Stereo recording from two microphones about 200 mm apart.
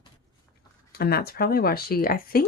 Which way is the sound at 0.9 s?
50° left (ahead or behind).